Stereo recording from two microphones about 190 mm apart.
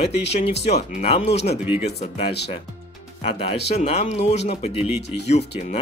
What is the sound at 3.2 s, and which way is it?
Speech, 35° left (ahead or behind).